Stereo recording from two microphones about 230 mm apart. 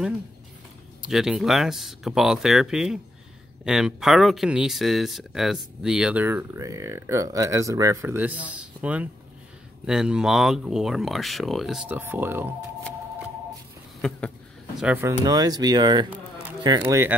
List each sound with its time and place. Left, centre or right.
1.0 s speech: centre
14.0 s a sound: centre
14.8 s speech: centre